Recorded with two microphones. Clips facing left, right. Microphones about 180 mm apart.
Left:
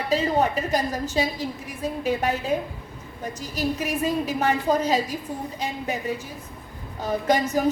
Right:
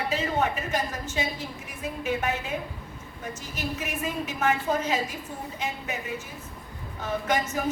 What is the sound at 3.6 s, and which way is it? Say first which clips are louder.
A woman's voice: left 7 dB; 35° left (ahead or behind).